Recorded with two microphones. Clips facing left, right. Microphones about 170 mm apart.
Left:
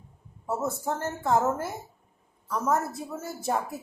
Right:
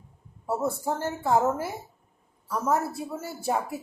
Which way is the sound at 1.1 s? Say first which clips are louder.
Right 1 dB; 10° right (ahead or behind).